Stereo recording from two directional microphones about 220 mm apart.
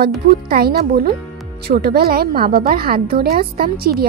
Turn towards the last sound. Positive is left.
turn(degrees=-45)  # may be behind; listen again after turning